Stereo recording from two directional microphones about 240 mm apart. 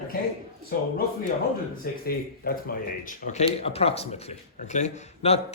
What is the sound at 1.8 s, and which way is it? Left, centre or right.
Speech, left.